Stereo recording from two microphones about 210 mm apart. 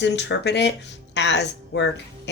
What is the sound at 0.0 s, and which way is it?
A woman's voice, 55° left (ahead or behind).